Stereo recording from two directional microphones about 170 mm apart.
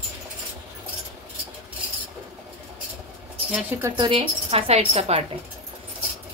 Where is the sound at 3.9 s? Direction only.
30° right (ahead or behind).